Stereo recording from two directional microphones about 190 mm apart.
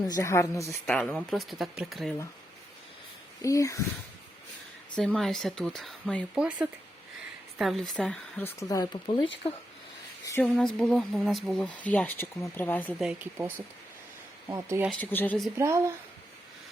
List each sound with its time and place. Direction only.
0.0 s speech: 20° left (ahead or behind); by 2.1 s centre (ahead or behind)
3.4 s speech: 15° left (ahead or behind)
4.9 s speech: centre (ahead or behind); by 9.0 s 20° left (ahead or behind)
10.2 s a sound: 10° left (ahead or behind)
10.5 s speech: 5° left (ahead or behind)
13.0 s speech: 5° right (ahead or behind)
14.5 s speech: 15° right (ahead or behind)
14.8 s speech: 10° left (ahead or behind)
15.5 s speech: 15° right (ahead or behind)